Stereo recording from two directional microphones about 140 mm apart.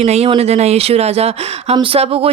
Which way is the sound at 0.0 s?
50° right (ahead or behind).